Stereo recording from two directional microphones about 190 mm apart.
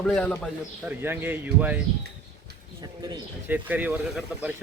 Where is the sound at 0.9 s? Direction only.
10° right (ahead or behind).